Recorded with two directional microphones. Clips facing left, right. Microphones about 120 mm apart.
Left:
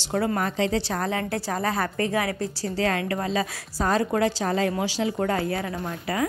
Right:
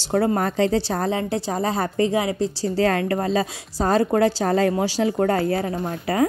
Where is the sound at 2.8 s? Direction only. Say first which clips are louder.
Right 5 dB; 40° right (ahead or behind).